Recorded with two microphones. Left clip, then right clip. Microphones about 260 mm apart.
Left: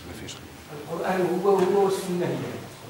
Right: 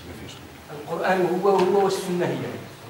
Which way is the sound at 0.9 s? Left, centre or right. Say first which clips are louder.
Right 3 dB; centre.